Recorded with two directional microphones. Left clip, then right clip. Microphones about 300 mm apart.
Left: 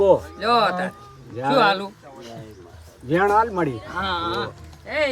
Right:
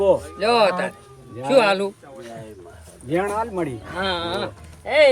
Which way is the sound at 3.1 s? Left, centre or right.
Centre.